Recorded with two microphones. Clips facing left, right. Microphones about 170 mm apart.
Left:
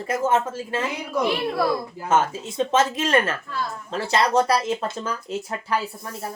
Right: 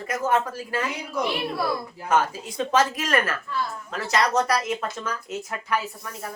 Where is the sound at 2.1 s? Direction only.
25° left (ahead or behind).